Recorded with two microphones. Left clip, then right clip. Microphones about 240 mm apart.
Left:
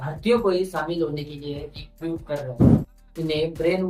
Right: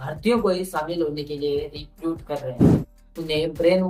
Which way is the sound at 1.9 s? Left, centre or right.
Centre.